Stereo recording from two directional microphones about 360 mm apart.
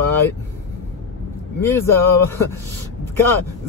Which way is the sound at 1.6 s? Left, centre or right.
Centre.